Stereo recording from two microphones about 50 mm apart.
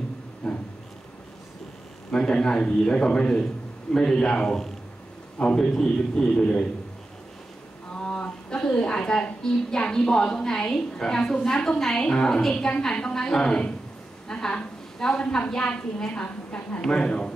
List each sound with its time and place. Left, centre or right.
0.4 s a sound: centre
2.0 s a woman's voice: centre
5.4 s a woman's voice: left
7.9 s a woman's voice: left
14.2 s a sound: centre
15.0 s a woman's voice: centre
16.1 s a woman's voice: left
16.8 s a woman's voice: centre